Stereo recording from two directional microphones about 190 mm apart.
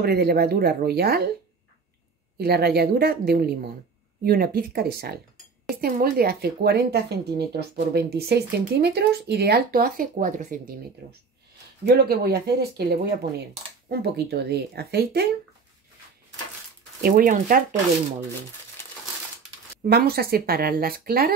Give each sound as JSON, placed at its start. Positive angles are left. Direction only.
{"t": 0.0, "sound": "speech", "side_deg": -55}
{"t": 2.3, "sound": "speech", "side_deg": -55}
{"t": 17.0, "sound": "speech", "side_deg": -45}
{"t": 19.8, "sound": "speech", "side_deg": -50}